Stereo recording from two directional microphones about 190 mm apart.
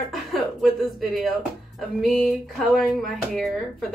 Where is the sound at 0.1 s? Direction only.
Centre (ahead or behind).